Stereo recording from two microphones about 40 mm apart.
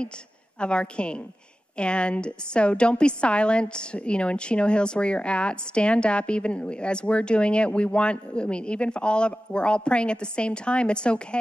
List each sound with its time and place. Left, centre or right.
0.6 s a woman's voice: left